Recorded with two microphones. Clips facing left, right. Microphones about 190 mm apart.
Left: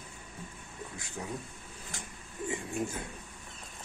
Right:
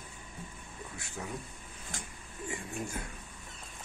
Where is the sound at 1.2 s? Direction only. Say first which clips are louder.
Left 1 dB; 20° left (ahead or behind).